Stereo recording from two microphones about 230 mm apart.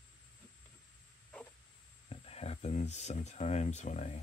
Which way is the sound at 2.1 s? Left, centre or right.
Left.